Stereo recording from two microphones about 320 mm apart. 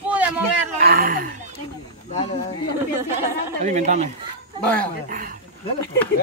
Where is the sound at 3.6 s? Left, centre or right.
Right.